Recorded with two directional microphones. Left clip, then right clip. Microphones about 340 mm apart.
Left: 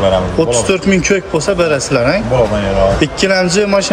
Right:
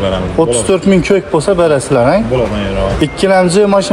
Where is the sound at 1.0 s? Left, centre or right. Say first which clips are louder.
Right 2 dB; centre.